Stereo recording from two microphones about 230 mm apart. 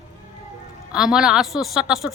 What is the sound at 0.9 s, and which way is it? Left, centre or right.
A man's voice, centre.